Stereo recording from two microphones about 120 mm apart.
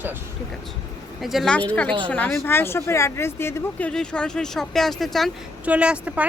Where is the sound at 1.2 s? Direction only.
Centre (ahead or behind); by 3.9 s 20° left (ahead or behind).